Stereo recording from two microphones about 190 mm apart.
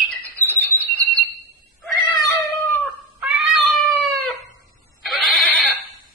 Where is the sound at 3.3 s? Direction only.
Centre (ahead or behind).